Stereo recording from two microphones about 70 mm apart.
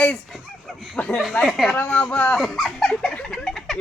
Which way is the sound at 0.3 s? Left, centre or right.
Centre.